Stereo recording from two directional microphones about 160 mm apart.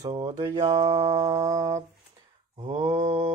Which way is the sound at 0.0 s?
25° right (ahead or behind).